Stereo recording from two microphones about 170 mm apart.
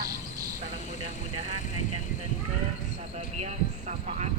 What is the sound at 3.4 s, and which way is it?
Speech, 40° right (ahead or behind).